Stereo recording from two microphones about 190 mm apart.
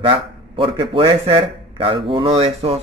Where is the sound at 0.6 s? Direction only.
25° right (ahead or behind).